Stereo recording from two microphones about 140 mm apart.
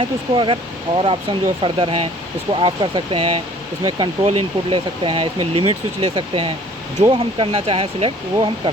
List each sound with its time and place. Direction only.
0.0 s speech: 35° right (ahead or behind)
4.2 s speech: 45° right (ahead or behind)